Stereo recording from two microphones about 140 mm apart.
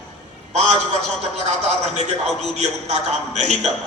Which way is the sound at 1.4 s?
55° right (ahead or behind).